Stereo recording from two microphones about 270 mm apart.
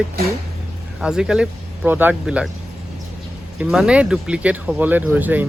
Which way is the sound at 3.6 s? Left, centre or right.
Centre.